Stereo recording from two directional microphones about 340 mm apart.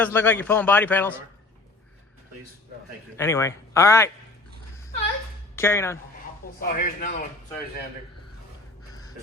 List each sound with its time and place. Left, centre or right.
0.0 s a man's voice: centre
3.2 s speech: centre
5.5 s speech: centre
6.6 s speech: left